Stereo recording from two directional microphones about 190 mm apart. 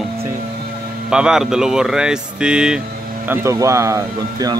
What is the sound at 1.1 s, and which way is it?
Speech, 5° right (ahead or behind).